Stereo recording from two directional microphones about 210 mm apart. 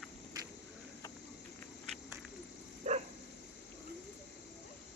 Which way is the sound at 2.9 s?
35° right (ahead or behind).